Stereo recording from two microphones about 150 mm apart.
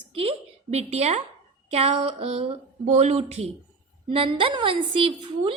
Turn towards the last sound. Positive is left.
turn(degrees=-35)  # may be behind; listen again after turning